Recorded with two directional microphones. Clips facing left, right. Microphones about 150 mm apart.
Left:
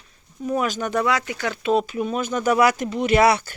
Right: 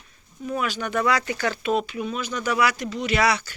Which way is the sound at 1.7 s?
45° left (ahead or behind).